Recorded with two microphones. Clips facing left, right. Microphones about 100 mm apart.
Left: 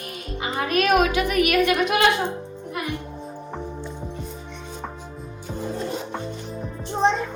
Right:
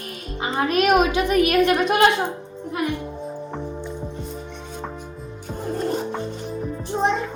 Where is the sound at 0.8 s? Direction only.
25° right (ahead or behind).